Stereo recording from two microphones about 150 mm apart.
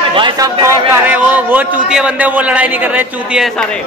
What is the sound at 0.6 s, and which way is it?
A man's voice, 15° right (ahead or behind).